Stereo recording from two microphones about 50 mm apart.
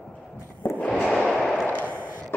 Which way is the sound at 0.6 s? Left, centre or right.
Left.